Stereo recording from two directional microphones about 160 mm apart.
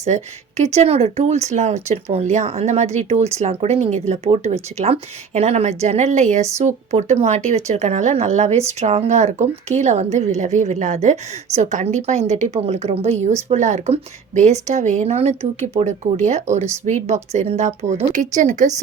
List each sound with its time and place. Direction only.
0.0 s speech: 45° right (ahead or behind)